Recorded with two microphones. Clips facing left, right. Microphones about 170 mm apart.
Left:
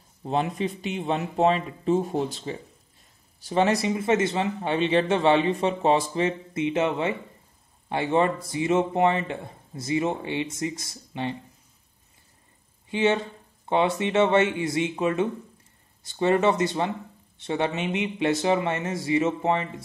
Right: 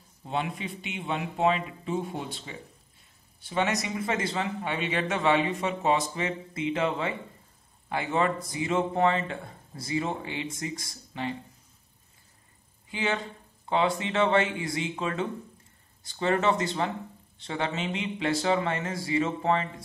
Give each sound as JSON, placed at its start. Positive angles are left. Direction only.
{"t": 0.2, "sound": "a man's voice", "side_deg": 40}
{"t": 12.9, "sound": "speech", "side_deg": 25}